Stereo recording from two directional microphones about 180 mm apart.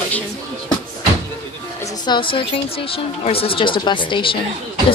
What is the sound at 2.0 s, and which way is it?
Speech, 25° left (ahead or behind).